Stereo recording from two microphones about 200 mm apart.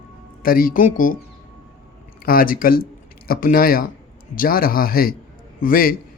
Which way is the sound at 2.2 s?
45° left (ahead or behind).